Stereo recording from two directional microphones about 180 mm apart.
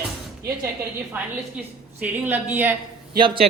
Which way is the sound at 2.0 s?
5° right (ahead or behind).